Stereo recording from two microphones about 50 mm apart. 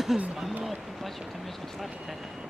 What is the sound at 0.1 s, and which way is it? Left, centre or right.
Speech, centre.